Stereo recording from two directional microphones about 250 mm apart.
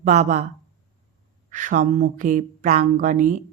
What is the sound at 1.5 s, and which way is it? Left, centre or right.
Speech, right.